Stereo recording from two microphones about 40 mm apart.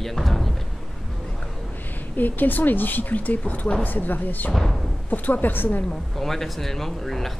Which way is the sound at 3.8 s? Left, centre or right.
Left.